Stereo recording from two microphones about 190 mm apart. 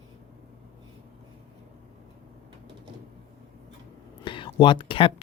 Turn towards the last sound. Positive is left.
turn(degrees=25)  # may be behind; listen again after turning